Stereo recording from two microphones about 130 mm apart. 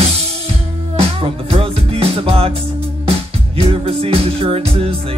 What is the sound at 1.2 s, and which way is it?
Music, 50° right (ahead or behind).